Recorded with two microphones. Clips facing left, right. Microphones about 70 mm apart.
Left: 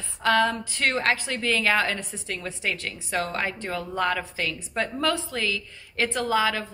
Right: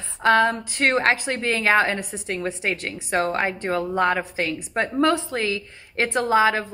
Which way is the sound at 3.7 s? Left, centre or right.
Right.